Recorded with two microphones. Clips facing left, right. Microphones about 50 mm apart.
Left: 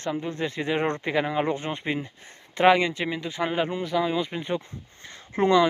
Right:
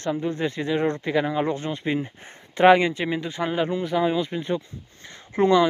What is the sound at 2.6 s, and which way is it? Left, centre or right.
Speech, centre.